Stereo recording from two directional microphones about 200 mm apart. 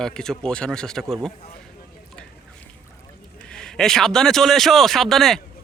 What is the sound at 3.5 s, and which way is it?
Speech, 5° left (ahead or behind).